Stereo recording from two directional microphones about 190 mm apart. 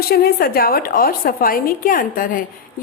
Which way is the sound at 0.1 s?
55° left (ahead or behind).